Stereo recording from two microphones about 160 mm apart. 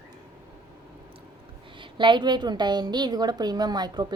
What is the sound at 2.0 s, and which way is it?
A woman's voice, 30° right (ahead or behind).